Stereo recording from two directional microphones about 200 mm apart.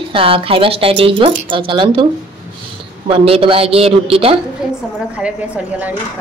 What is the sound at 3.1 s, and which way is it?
Speech, 30° right (ahead or behind).